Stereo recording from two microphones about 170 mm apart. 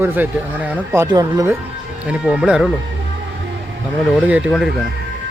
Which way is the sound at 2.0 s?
5° right (ahead or behind).